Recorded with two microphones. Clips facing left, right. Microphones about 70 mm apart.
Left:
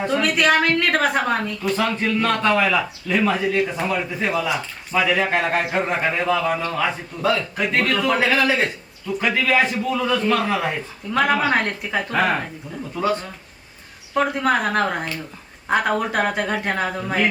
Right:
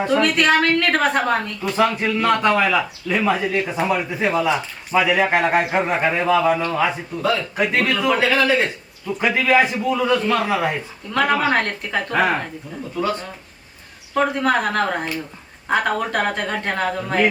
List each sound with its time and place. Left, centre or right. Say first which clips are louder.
0.0 s a woman's voice: right 2 dB; centre
8.3 s a man's voice: right 2 dB; centre
8.6 s a man's voice: even; centre
11.1 s a woman's voice: even; centre
14.2 s a woman's voice: right 1 dB; centre